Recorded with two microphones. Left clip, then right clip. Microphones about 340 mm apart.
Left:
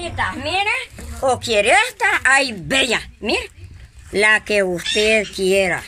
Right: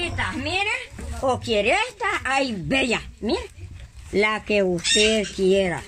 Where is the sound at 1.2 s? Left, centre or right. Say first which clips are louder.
Left 5 dB; left.